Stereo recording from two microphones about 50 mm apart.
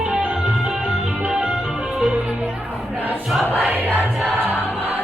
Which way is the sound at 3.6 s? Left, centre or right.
Right.